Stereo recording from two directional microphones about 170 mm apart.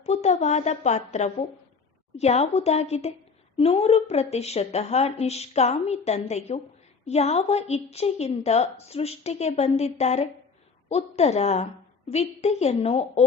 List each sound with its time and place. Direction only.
0.0 s a woman's voice: 40° left (ahead or behind)